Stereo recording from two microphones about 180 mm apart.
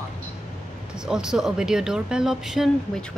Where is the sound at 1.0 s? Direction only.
5° right (ahead or behind).